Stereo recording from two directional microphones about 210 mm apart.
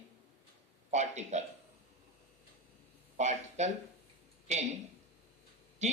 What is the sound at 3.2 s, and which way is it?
Speech, 35° right (ahead or behind).